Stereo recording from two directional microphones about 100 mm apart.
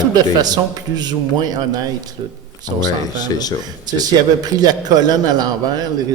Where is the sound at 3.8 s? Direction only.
40° right (ahead or behind).